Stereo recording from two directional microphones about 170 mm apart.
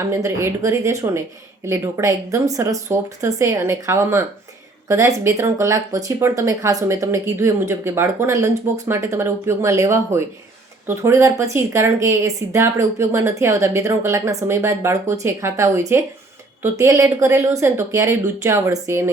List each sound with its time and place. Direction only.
0.0 s speech: 15° right (ahead or behind)